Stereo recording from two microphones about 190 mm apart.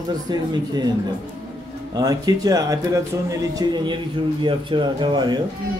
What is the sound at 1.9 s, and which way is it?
Speech, 20° right (ahead or behind).